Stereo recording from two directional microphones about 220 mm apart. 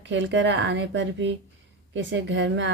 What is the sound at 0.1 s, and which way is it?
Speech, 55° right (ahead or behind).